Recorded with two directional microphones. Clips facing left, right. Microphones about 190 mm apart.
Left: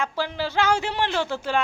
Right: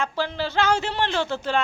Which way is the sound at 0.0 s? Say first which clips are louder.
Right 1 dB; 10° left (ahead or behind).